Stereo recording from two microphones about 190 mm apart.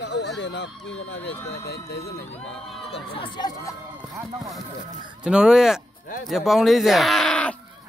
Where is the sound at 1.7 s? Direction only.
55° left (ahead or behind).